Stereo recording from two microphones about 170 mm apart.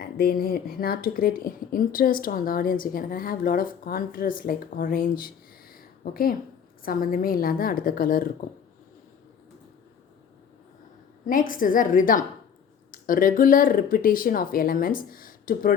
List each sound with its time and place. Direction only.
0.0 s speech: 65° left (ahead or behind)
5.7 s a sound: 60° left (ahead or behind)
6.8 s speech: 55° left (ahead or behind)
11.3 s a woman's voice: 55° left (ahead or behind)